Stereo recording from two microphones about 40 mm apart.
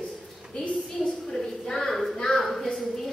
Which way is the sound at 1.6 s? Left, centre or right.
Centre.